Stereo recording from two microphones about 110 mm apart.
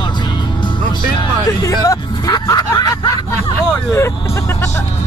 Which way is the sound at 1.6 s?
30° left (ahead or behind).